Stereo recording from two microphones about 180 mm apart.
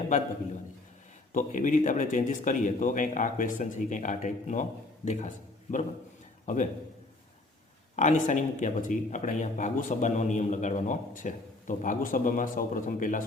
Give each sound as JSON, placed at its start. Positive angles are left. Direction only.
{"t": 1.3, "sound": "a man's voice", "side_deg": 45}
{"t": 6.4, "sound": "a sound", "side_deg": 45}
{"t": 7.9, "sound": "speech", "side_deg": 40}